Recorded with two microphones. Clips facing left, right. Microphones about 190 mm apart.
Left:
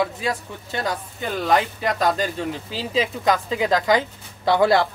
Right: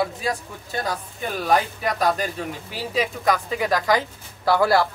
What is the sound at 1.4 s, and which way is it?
A woman's voice, 25° left (ahead or behind).